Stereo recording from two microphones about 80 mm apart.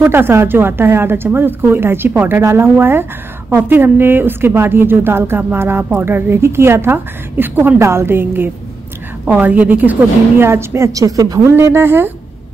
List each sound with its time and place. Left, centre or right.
0.0 s a woman's voice: right
10.4 s a woman's voice: right
11.0 s a woman's voice: right
11.5 s a woman's voice: right